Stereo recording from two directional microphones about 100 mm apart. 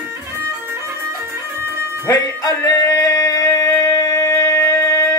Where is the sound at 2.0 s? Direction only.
35° left (ahead or behind).